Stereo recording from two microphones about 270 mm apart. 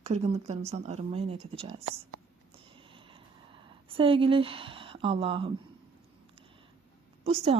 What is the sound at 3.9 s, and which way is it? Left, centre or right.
Speech, centre.